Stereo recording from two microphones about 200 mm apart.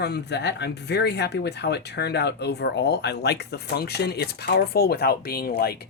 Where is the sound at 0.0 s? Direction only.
55° left (ahead or behind).